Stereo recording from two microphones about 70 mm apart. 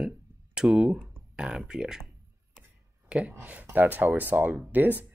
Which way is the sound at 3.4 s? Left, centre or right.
Right.